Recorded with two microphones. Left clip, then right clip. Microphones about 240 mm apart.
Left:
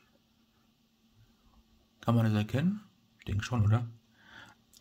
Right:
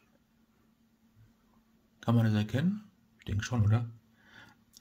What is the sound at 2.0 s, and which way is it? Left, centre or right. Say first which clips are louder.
Speech: even; centre.